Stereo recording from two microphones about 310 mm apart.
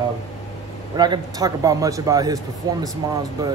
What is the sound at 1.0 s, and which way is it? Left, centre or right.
Speech, centre.